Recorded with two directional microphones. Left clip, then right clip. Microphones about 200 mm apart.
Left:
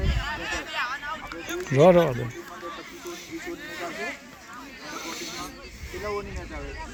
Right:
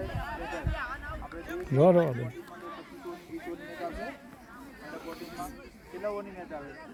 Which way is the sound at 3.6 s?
40° right (ahead or behind).